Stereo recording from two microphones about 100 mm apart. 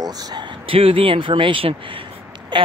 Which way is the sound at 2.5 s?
55° right (ahead or behind).